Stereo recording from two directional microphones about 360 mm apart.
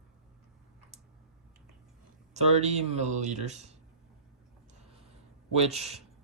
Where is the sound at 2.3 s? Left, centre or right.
Centre.